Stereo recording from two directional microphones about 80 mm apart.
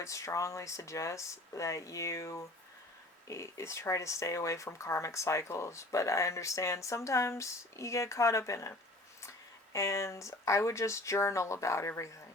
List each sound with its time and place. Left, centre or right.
0.0 s speech: left
9.7 s speech: left